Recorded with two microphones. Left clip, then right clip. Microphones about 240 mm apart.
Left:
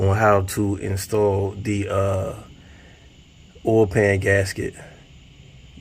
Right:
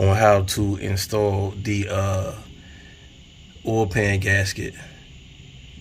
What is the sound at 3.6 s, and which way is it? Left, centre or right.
Speech, centre.